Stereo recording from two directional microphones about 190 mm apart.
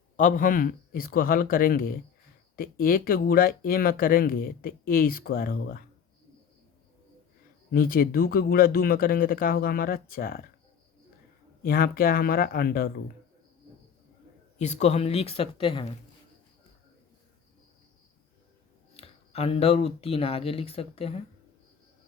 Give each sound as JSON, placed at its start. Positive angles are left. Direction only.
{"t": 0.2, "sound": "speech", "side_deg": 45}
{"t": 7.7, "sound": "speech", "side_deg": 50}
{"t": 11.6, "sound": "speech", "side_deg": 50}
{"t": 14.6, "sound": "speech", "side_deg": 35}
{"t": 18.9, "sound": "speech", "side_deg": 30}